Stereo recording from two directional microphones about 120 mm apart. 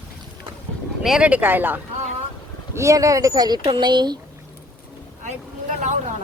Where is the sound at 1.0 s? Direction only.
5° right (ahead or behind).